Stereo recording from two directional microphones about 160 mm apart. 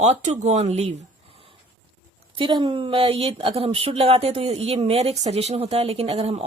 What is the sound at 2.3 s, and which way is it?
Speech, 30° right (ahead or behind).